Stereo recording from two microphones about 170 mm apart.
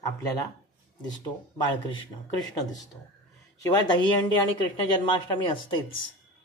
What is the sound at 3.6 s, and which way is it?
Speech, 25° left (ahead or behind).